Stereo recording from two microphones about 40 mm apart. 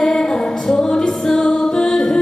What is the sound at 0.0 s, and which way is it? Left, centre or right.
Music, centre.